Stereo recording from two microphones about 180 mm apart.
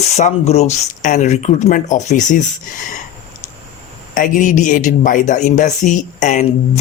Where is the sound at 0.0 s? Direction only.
40° left (ahead or behind).